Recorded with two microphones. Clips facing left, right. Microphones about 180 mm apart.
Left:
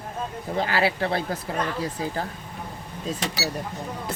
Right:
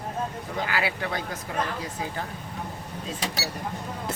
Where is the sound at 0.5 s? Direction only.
35° left (ahead or behind).